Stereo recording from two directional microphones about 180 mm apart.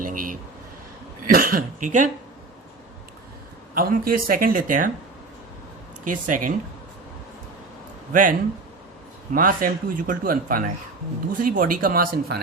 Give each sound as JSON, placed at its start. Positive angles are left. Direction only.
{"t": 0.0, "sound": "a sound", "side_deg": -50}
{"t": 1.3, "sound": "speech", "side_deg": -55}
{"t": 3.8, "sound": "speech", "side_deg": -55}
{"t": 6.1, "sound": "speech", "side_deg": -45}
{"t": 8.1, "sound": "speech", "side_deg": -50}